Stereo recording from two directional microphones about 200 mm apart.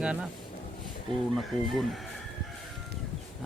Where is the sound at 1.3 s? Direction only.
Centre (ahead or behind).